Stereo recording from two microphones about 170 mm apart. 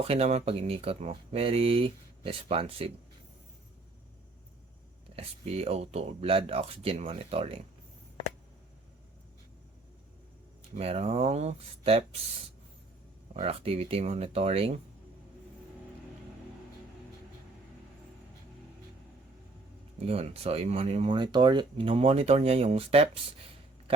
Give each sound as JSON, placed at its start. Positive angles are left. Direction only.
{"t": 0.0, "sound": "speech", "side_deg": -40}
{"t": 5.1, "sound": "speech", "side_deg": -35}
{"t": 10.8, "sound": "speech", "side_deg": -35}
{"t": 13.3, "sound": "speech", "side_deg": -35}
{"t": 20.0, "sound": "speech", "side_deg": -40}